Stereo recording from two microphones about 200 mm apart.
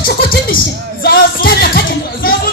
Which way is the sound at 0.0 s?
45° left (ahead or behind).